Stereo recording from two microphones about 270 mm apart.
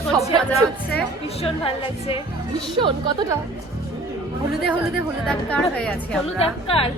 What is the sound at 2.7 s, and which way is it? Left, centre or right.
Speech, centre.